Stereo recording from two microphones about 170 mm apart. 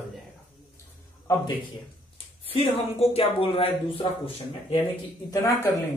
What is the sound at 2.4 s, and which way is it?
Speech, 35° left (ahead or behind).